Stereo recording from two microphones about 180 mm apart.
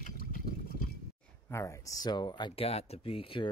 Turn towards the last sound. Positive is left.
turn(degrees=30)  # may be behind; listen again after turning